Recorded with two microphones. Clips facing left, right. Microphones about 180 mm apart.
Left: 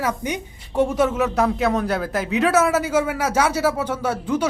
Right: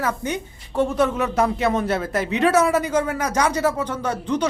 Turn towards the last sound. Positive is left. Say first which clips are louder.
# left 1 dB
turn(degrees=5)  # may be behind; listen again after turning